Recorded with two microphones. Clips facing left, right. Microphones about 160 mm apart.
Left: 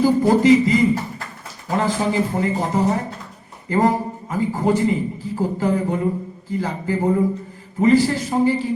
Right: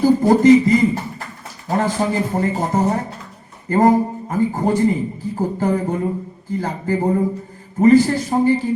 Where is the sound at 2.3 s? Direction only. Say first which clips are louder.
Right 2 dB; 40° right (ahead or behind).